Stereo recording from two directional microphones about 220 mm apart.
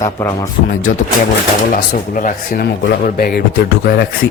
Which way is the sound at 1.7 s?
40° left (ahead or behind).